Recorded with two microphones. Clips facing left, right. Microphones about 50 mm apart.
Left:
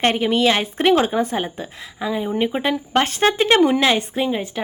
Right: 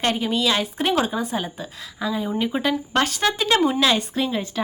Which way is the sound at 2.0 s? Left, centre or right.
Left.